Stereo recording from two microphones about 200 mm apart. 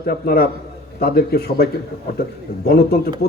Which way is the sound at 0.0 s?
50° left (ahead or behind).